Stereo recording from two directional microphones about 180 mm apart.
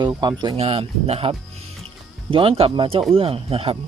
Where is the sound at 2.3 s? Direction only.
30° right (ahead or behind).